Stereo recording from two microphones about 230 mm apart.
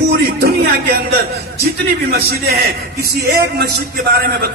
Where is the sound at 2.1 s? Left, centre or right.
Right.